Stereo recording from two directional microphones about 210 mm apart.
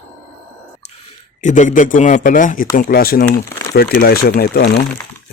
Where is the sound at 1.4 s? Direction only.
35° left (ahead or behind).